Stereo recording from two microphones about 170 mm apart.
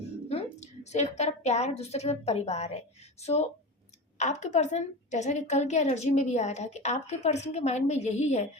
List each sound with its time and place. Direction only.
0.3 s a woman's voice: 40° left (ahead or behind)